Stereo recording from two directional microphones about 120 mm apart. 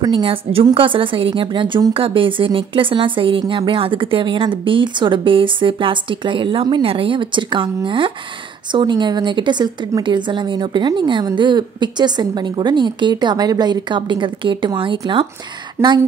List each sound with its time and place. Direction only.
0.0 s a woman's voice: 40° right (ahead or behind)
15.8 s speech: 20° right (ahead or behind)